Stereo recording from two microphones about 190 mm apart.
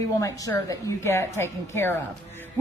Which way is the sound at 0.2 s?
20° left (ahead or behind).